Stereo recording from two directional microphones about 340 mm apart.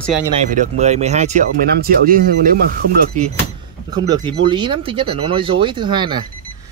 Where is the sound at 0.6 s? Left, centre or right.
Centre.